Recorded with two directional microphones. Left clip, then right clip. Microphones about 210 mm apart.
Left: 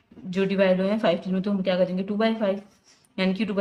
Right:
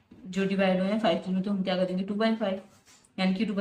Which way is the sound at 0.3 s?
55° left (ahead or behind).